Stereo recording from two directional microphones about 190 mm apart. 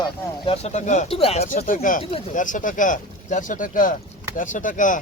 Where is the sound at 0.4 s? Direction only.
35° left (ahead or behind).